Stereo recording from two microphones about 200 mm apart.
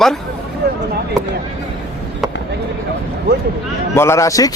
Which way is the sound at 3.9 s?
15° left (ahead or behind).